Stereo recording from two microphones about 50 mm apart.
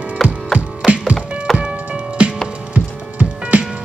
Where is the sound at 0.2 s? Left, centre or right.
Centre.